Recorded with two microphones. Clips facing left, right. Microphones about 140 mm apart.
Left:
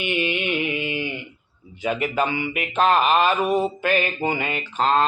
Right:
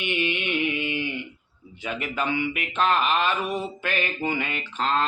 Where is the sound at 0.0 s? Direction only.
5° left (ahead or behind).